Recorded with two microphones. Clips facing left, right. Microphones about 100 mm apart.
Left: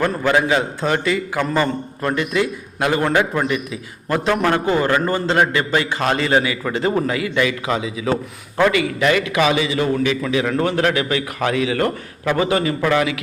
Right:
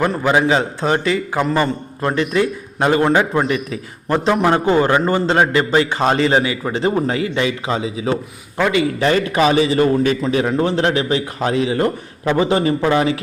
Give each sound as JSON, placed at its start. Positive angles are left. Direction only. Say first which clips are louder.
{"t": 0.2, "sound": "a man's voice", "louder": "right 1 dB", "side_deg": -15}
{"t": 0.4, "sound": "a man's voice", "louder": "right 2 dB", "side_deg": -30}
{"t": 10.5, "sound": "a man's voice", "louder": "right 1 dB", "side_deg": -25}